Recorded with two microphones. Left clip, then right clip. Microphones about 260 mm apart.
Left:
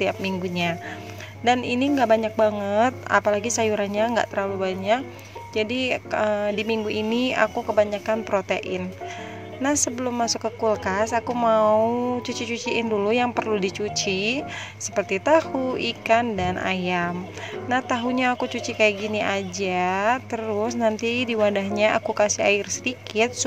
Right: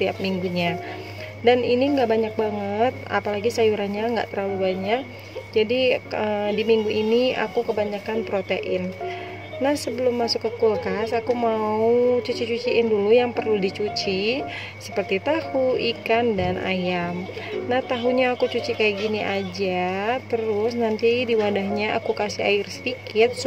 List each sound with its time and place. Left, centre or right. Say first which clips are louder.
0.0 s speech: right 1 dB; left
9.9 s speech: right 3 dB; left
12.2 s a woman's voice: right 5 dB; left
12.4 s speech: right 4 dB; left
13.7 s speech: right 1 dB; left
14.0 s speech: right 1 dB; left